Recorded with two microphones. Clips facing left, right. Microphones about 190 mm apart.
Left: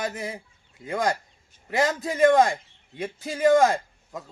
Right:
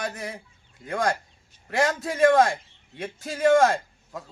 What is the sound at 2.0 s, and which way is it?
Speech, 15° left (ahead or behind).